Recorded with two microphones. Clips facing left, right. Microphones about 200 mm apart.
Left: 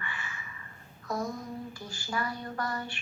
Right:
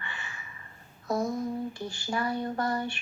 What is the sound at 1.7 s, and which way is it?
A woman's voice, 25° right (ahead or behind).